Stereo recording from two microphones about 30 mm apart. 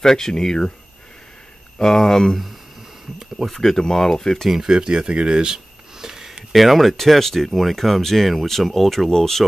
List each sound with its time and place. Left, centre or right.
0.0 s speech: centre
1.8 s speech: centre
3.5 s speech: centre
4.5 s speech: centre
4.7 s a sound: right
6.5 s speech: centre